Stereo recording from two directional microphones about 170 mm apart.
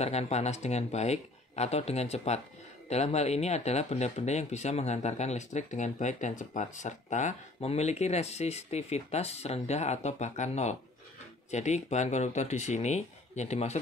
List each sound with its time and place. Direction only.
0.0 s speech: 40° left (ahead or behind)